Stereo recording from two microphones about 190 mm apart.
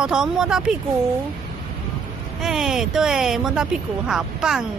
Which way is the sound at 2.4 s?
Centre (ahead or behind).